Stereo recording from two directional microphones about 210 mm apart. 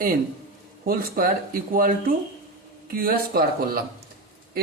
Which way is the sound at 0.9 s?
45° right (ahead or behind).